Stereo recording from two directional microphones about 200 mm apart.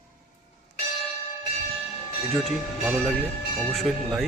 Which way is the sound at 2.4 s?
5° right (ahead or behind).